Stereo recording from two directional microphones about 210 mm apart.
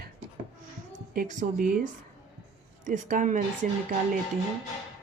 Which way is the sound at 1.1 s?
40° right (ahead or behind).